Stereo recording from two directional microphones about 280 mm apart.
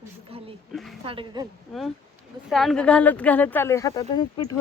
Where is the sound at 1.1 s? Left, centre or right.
Centre.